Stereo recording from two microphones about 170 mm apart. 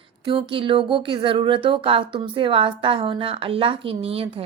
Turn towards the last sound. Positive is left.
turn(degrees=-35)  # may be behind; listen again after turning